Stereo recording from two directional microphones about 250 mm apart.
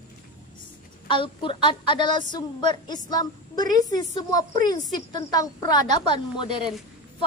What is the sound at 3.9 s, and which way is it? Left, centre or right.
A woman's voice, centre.